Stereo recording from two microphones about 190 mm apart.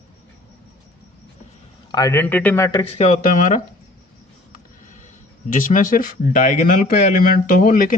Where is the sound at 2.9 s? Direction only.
40° left (ahead or behind).